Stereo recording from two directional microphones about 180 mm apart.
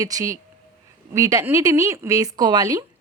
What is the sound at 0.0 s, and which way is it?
A woman's voice, 20° right (ahead or behind).